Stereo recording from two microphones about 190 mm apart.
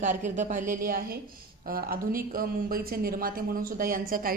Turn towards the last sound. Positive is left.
turn(degrees=-50)  # may be behind; listen again after turning